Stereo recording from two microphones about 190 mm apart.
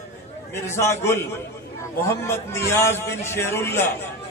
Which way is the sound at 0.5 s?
15° left (ahead or behind).